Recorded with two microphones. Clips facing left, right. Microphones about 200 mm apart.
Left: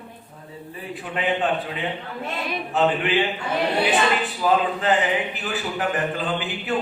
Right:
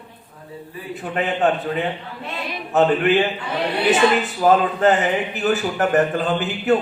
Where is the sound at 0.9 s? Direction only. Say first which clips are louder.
Right 2 dB; 45° right (ahead or behind).